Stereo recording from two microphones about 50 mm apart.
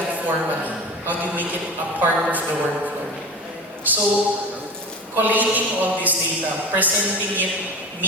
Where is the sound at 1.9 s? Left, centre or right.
Right.